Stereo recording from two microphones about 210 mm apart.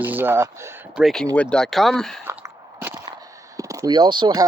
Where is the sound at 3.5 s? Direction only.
15° right (ahead or behind).